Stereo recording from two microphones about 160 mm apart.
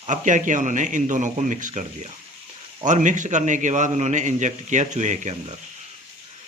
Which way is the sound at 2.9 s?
50° right (ahead or behind).